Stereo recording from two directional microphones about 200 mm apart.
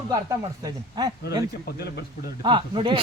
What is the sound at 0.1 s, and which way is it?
A man's voice, 20° right (ahead or behind).